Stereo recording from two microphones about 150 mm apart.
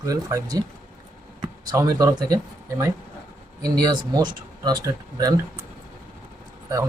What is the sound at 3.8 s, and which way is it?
Speech, 30° right (ahead or behind).